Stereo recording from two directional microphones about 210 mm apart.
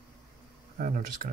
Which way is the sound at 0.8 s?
40° right (ahead or behind).